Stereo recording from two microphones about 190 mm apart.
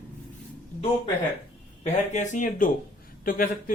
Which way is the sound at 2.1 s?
40° left (ahead or behind).